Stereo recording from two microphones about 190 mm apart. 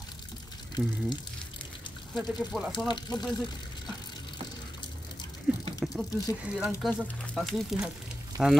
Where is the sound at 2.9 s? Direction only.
20° left (ahead or behind).